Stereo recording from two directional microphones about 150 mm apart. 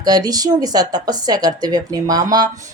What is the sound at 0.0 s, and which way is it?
Speech, 25° right (ahead or behind).